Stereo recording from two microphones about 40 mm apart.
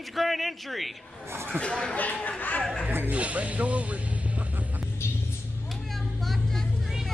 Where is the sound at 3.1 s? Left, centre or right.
Right.